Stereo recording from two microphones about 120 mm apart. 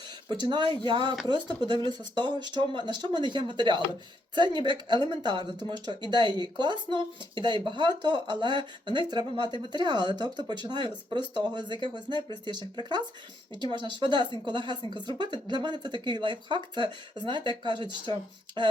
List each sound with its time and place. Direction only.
0.3 s speech: 40° right (ahead or behind)